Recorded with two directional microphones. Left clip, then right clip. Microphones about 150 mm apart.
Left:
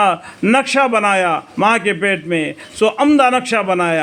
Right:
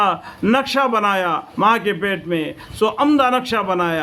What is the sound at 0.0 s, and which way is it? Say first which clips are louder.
A man's voice: left 3 dB; 20° left (ahead or behind).